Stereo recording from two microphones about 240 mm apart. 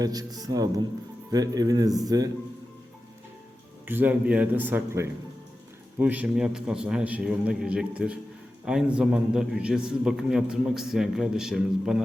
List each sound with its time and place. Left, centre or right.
0.0 s speech: centre
3.8 s a man's voice: centre